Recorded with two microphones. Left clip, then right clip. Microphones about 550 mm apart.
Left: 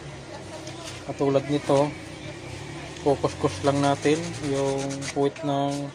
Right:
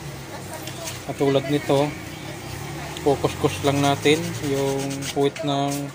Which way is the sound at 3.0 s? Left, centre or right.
Left.